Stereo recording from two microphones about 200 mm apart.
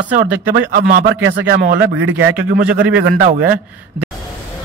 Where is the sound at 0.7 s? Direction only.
45° right (ahead or behind).